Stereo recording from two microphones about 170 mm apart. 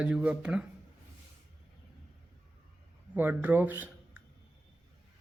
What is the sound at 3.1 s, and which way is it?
Speech, 10° right (ahead or behind).